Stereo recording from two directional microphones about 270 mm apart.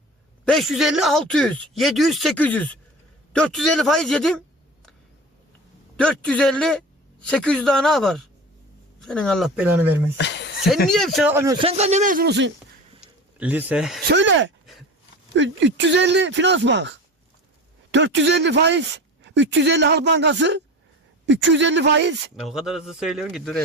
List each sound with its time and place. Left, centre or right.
0.4 s speech: centre
6.0 s speech: centre
10.2 s a sound: left
10.8 s speech: centre
11.6 s speech: right
13.4 s speech: centre
14.1 s speech: right
17.9 s speech: right
22.4 s speech: centre